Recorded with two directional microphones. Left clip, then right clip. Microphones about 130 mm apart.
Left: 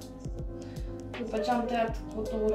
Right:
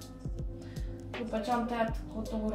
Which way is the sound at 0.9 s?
Centre (ahead or behind).